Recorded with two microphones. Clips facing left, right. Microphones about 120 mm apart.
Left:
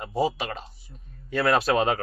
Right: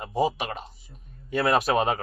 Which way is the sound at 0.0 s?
15° right (ahead or behind).